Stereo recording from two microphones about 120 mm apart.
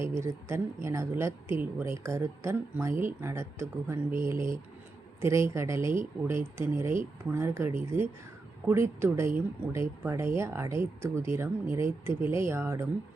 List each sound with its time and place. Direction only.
0.0 s speech: 20° right (ahead or behind)